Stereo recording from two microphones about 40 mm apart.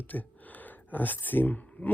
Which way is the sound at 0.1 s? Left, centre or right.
Left.